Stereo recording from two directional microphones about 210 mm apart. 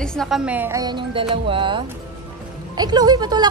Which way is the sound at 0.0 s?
5° left (ahead or behind).